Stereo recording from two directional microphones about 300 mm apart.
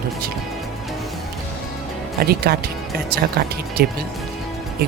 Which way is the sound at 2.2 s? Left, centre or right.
Right.